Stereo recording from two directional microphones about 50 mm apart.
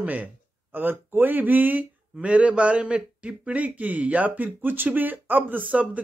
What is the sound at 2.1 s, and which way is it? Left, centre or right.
A man's voice, right.